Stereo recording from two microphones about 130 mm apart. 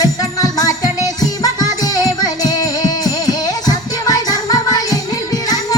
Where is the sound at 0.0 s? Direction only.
30° left (ahead or behind).